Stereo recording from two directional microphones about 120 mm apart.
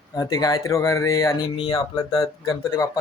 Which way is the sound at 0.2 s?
30° left (ahead or behind).